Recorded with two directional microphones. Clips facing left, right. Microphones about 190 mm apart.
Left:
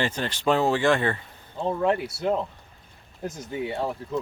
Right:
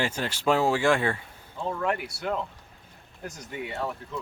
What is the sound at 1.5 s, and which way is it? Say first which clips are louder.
Speech: left 5 dB; 30° left (ahead or behind).